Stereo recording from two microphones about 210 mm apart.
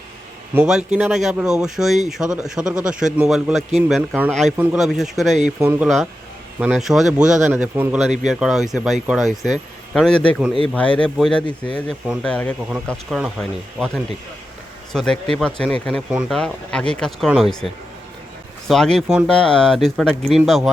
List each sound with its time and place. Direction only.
0.5 s speech: 5° right (ahead or behind)
11.4 s speech: 25° left (ahead or behind)
11.9 s speech: centre (ahead or behind)
12.6 s speech: 5° right (ahead or behind)
18.7 s speech: centre (ahead or behind)